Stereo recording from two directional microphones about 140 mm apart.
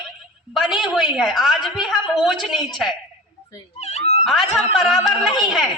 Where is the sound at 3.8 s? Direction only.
50° left (ahead or behind).